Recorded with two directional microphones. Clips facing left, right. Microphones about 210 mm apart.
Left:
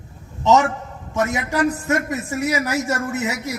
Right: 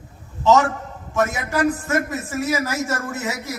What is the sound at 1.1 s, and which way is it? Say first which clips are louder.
A man's voice: even; 20° left (ahead or behind).